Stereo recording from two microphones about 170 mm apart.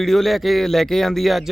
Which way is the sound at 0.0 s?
Centre (ahead or behind).